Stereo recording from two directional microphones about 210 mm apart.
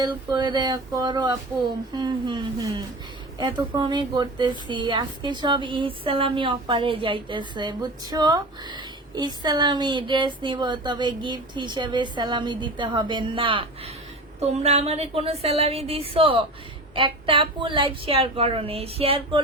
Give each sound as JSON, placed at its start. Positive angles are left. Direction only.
{"t": 0.0, "sound": "a woman's voice", "side_deg": -20}